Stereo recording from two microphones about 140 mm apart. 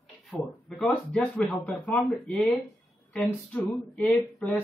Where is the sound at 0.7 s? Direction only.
Centre (ahead or behind).